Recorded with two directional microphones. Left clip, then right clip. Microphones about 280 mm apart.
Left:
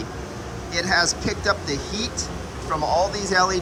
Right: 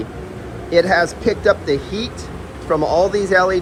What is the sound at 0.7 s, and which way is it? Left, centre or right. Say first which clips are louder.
A man's voice: right 7 dB; centre.